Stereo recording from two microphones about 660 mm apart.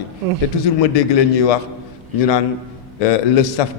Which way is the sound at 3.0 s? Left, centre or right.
Left.